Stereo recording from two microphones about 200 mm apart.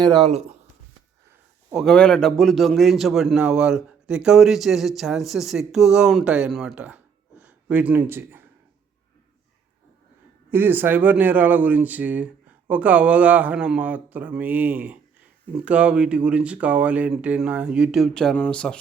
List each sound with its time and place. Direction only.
0.0 s speech: 25° right (ahead or behind)
1.7 s a man's voice: centre (ahead or behind)
10.5 s a man's voice: 10° right (ahead or behind)